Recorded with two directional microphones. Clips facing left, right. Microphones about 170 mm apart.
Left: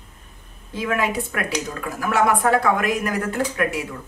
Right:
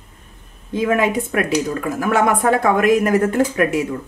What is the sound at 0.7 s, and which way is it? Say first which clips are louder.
Speech: right 6 dB; 20° right (ahead or behind).